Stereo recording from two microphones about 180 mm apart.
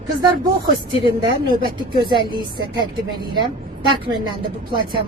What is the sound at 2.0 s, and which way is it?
Speech, 25° right (ahead or behind).